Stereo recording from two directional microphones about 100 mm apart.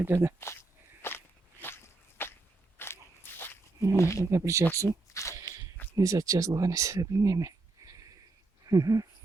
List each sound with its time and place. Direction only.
0.0 s speech: 25° right (ahead or behind)
0.3 s speech: 25° left (ahead or behind)
1.0 s walk: 20° left (ahead or behind)
3.9 s speech: 30° left (ahead or behind)
4.3 s speech: 30° right (ahead or behind)
4.9 s a sound: 30° left (ahead or behind)
6.0 s speech: 35° right (ahead or behind)